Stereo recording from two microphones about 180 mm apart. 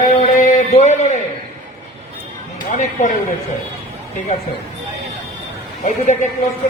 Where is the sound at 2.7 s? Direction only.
45° left (ahead or behind).